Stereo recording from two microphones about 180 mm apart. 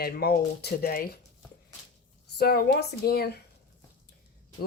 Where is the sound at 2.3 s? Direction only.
60° left (ahead or behind).